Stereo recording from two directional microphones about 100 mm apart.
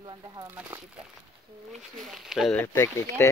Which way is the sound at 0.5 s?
15° right (ahead or behind).